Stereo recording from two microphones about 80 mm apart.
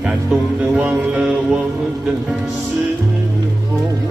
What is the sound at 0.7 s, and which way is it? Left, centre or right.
Music, centre.